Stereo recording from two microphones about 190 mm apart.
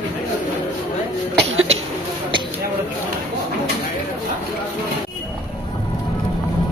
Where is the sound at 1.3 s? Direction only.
75° right (ahead or behind).